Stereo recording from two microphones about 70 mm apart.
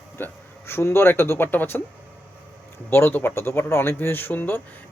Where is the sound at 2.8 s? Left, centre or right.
Left.